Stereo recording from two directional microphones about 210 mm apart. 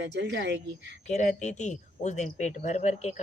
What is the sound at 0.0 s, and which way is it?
Speech, 55° right (ahead or behind).